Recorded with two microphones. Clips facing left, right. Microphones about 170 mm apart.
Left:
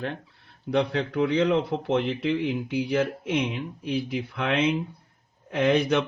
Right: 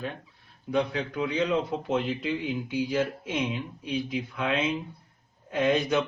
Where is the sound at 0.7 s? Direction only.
70° left (ahead or behind).